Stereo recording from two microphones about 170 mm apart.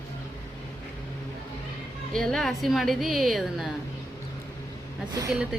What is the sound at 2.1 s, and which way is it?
A woman's voice, 5° left (ahead or behind).